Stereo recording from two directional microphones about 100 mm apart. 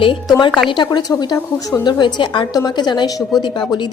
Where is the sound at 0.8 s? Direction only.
45° left (ahead or behind).